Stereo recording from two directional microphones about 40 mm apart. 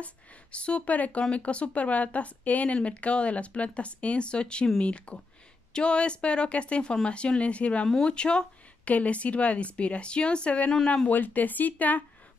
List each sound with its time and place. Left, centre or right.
0.0 s speech: left
8.8 s speech: left
11.1 s speech: left